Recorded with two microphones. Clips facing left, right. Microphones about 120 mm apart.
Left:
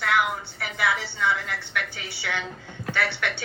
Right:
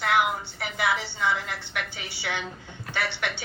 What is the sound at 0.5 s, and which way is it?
Speech, 25° right (ahead or behind).